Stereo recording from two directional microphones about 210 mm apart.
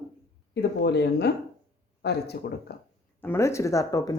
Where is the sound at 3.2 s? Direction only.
10° left (ahead or behind).